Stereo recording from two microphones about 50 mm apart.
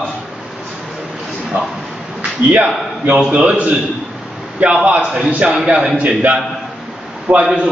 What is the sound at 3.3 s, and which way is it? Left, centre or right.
Speech, right.